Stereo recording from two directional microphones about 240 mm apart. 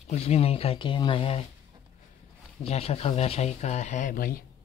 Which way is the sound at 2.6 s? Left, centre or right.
Left.